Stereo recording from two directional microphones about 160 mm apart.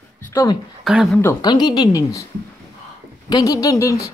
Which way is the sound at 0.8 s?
Centre (ahead or behind).